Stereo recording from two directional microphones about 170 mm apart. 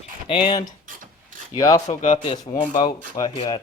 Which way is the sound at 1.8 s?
45° left (ahead or behind).